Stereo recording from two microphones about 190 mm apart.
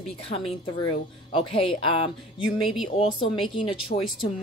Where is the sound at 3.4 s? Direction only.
25° left (ahead or behind).